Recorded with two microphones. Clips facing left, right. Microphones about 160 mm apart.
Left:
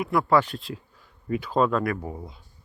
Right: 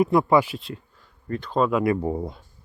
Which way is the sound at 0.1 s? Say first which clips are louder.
Right 3 dB; 20° right (ahead or behind).